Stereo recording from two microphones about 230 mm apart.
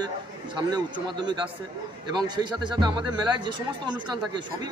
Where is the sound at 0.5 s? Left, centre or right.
Centre.